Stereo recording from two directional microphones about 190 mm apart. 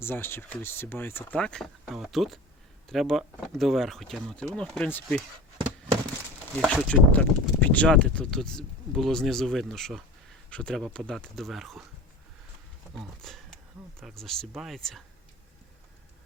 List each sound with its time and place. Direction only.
0.0 s speech: 10° left (ahead or behind)
6.6 s speech: 5° left (ahead or behind)
13.0 s speech: centre (ahead or behind)